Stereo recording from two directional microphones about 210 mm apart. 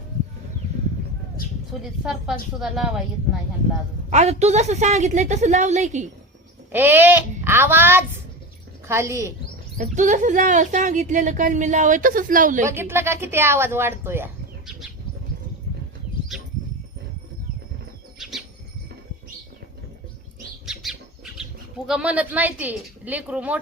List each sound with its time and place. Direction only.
2.6 s speech: centre (ahead or behind)
4.1 s speech: 30° right (ahead or behind)
6.7 s speech: 10° right (ahead or behind)
9.7 s speech: 35° right (ahead or behind)
12.6 s speech: 10° right (ahead or behind)
18.2 s bird: centre (ahead or behind)
21.8 s speech: 5° right (ahead or behind)